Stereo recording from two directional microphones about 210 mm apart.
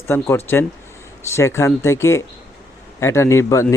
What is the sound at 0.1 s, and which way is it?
Speech, 10° left (ahead or behind).